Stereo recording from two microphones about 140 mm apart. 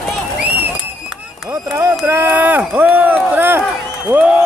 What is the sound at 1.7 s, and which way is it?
Run, 15° right (ahead or behind).